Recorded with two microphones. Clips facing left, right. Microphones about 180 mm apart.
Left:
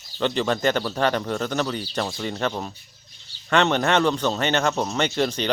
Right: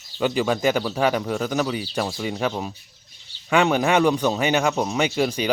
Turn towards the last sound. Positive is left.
turn(degrees=-10)  # may be behind; listen again after turning